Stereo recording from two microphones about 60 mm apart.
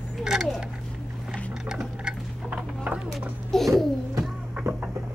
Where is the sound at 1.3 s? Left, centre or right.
Centre.